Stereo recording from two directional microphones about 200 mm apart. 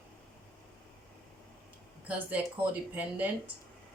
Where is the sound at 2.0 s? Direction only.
10° right (ahead or behind).